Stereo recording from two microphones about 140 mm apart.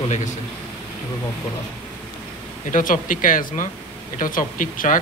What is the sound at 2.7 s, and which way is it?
Speech, 70° left (ahead or behind).